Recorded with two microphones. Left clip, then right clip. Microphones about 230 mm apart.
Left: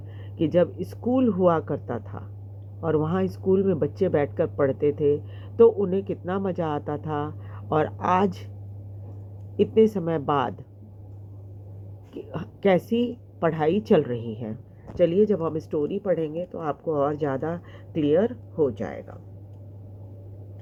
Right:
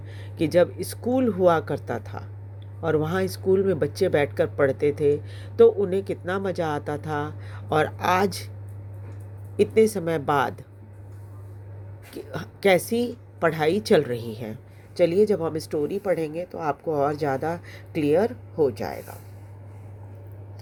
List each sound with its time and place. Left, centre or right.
0.3 s speech: right
1.7 s speech: right
2.8 s speech: right
9.6 s speech: right
12.1 s speech: right
15.4 s speech: right